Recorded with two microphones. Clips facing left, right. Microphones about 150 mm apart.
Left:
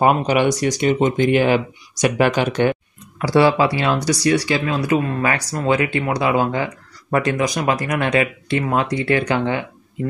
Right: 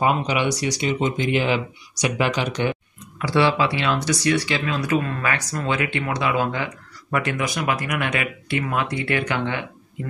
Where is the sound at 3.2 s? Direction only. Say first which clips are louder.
Left 5 dB; 40° left (ahead or behind).